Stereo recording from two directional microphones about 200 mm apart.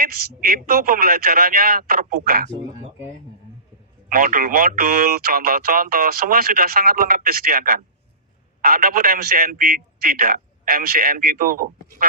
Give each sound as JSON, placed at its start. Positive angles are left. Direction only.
{"t": 0.0, "sound": "speech", "side_deg": -50}
{"t": 4.1, "sound": "speech", "side_deg": -45}